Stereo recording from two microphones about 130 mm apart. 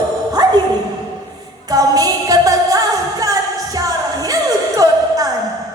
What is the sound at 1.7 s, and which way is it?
Music, 30° right (ahead or behind).